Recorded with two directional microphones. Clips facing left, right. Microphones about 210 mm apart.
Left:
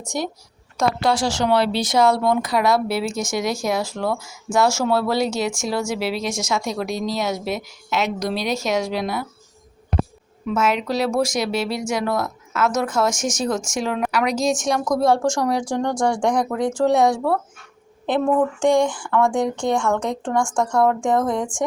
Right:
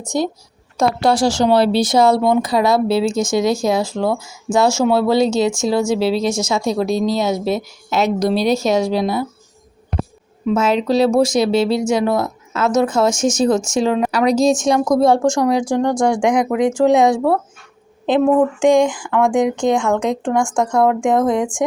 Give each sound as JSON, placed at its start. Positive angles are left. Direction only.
{"t": 1.0, "sound": "speech", "side_deg": -35}
{"t": 10.4, "sound": "speech", "side_deg": -30}
{"t": 15.7, "sound": "a woman's voice", "side_deg": -10}
{"t": 19.0, "sound": "a woman's voice", "side_deg": -10}